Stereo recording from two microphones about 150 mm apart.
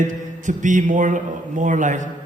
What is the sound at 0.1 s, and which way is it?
A man's voice, 55° right (ahead or behind).